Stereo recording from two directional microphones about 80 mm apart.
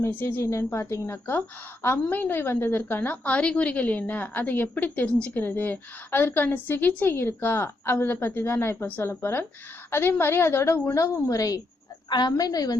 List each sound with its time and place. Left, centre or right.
0.0 s a woman's voice: left
12.0 s a woman's voice: left